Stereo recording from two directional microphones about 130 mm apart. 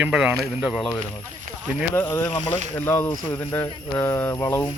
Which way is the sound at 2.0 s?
20° left (ahead or behind).